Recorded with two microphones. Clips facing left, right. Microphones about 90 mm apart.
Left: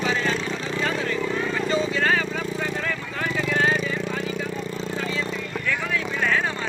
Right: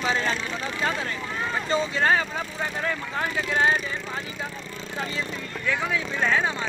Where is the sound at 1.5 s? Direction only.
30° right (ahead or behind).